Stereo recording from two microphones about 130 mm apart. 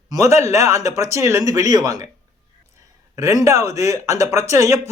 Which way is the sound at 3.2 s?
25° right (ahead or behind).